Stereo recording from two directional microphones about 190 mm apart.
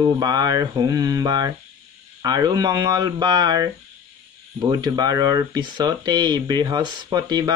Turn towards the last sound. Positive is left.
turn(degrees=-20)  # may be behind; listen again after turning